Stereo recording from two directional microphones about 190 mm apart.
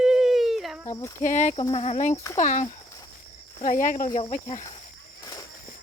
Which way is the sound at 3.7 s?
45° left (ahead or behind).